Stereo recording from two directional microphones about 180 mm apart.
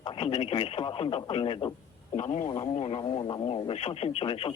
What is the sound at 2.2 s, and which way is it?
Speech, 40° left (ahead or behind).